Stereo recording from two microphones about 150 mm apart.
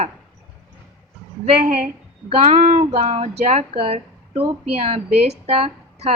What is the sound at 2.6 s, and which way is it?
A woman's voice, 55° right (ahead or behind).